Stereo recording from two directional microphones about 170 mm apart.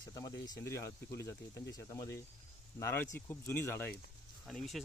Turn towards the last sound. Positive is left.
turn(degrees=0)  # may be behind; listen again after turning